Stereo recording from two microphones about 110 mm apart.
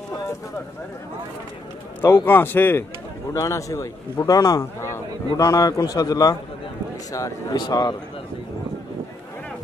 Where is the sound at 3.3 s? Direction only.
30° left (ahead or behind).